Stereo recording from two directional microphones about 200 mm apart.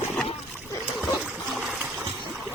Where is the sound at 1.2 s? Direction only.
Centre (ahead or behind).